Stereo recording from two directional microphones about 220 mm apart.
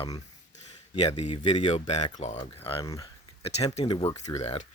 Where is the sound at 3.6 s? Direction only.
30° left (ahead or behind).